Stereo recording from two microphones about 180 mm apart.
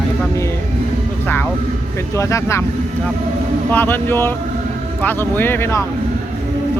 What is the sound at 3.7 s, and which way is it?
Speech, 10° left (ahead or behind).